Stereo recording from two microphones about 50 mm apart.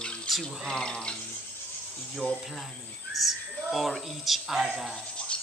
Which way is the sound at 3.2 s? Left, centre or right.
Centre.